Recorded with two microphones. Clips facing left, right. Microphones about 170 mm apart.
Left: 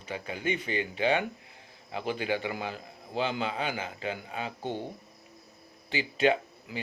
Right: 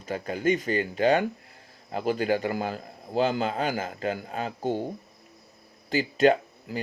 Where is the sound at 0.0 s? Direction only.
45° right (ahead or behind).